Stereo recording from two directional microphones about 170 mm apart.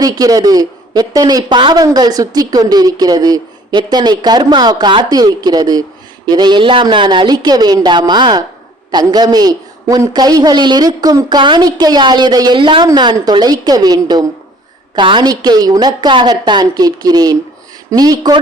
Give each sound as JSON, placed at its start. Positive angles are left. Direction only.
{"t": 0.0, "sound": "a man's voice", "side_deg": -20}